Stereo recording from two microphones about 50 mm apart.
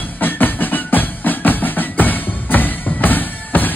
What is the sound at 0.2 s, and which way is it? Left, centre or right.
Music, left.